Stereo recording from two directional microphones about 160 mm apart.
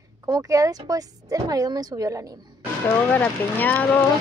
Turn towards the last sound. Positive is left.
turn(degrees=10)  # may be behind; listen again after turning